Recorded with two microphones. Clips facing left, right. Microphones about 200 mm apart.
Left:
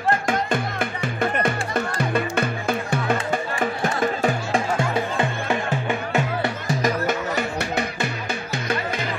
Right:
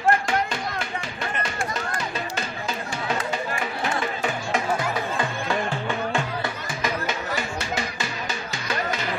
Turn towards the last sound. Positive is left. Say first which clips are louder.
# left 4 dB
turn(degrees=60)  # may be behind; listen again after turning